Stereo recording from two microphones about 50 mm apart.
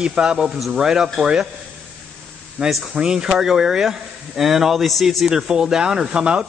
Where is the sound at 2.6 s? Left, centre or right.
Right; by 5.2 s centre.